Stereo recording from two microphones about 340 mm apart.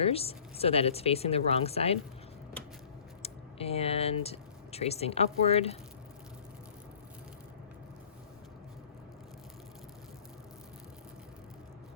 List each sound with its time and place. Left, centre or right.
0.0 s speech: centre
3.2 s speech: centre